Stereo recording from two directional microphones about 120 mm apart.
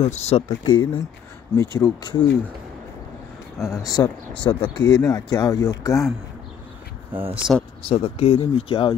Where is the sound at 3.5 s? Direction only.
25° left (ahead or behind).